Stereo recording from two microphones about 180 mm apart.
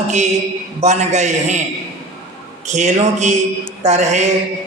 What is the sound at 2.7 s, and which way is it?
A man's voice, 40° right (ahead or behind).